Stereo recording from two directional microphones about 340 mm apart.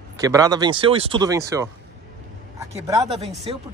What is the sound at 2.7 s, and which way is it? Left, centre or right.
Speech, centre.